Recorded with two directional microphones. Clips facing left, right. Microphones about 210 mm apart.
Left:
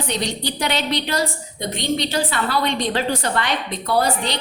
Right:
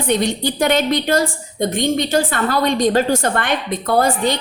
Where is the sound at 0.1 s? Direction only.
50° right (ahead or behind).